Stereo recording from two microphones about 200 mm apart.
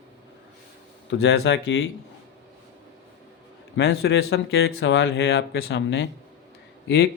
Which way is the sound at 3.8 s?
70° left (ahead or behind).